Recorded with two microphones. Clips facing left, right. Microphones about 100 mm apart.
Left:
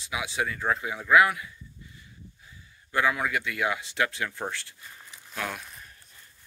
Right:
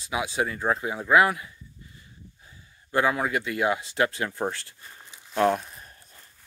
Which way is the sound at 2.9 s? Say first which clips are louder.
Right 2 dB; 35° right (ahead or behind).